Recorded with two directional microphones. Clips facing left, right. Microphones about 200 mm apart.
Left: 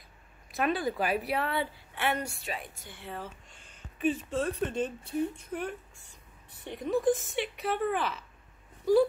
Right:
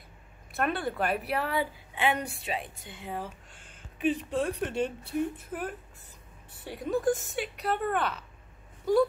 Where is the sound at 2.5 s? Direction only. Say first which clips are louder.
Right 4 dB; 20° right (ahead or behind).